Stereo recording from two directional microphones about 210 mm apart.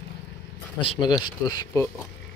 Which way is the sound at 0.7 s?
20° left (ahead or behind).